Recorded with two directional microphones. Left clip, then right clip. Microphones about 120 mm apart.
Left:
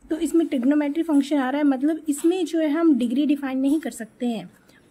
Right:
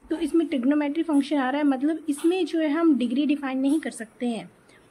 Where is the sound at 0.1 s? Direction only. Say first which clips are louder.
Left 2 dB; 40° left (ahead or behind).